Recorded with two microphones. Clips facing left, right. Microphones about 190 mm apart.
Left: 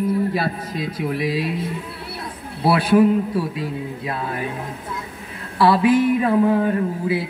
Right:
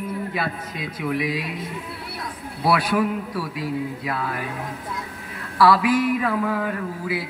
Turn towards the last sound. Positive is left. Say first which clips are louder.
# left 6 dB
turn(degrees=25)  # may be behind; listen again after turning